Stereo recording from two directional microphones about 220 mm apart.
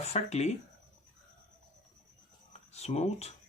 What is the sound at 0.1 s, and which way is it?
Speech, 30° left (ahead or behind).